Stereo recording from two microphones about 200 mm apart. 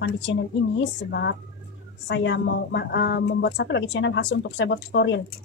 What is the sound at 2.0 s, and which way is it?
A woman's voice, 65° left (ahead or behind).